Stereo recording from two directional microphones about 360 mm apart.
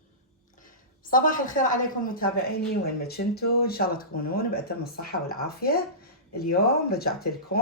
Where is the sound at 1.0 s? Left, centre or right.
Left.